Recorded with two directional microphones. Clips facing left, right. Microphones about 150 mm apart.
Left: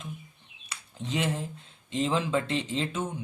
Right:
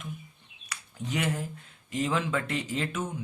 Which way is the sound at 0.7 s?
25° left (ahead or behind).